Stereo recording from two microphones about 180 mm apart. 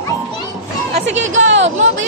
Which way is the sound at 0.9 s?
90° right.